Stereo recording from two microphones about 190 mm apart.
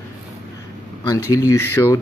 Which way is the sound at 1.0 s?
15° left (ahead or behind).